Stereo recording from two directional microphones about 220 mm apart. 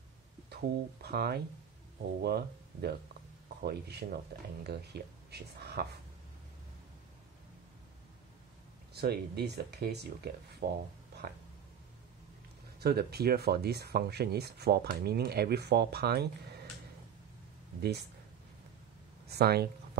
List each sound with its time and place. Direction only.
0.5 s speech: 45° right (ahead or behind)
8.9 s speech: 45° right (ahead or behind)
12.8 s speech: 45° right (ahead or behind)
19.2 s speech: 45° right (ahead or behind)